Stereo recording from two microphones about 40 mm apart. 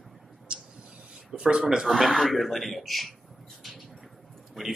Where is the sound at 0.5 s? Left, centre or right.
Right.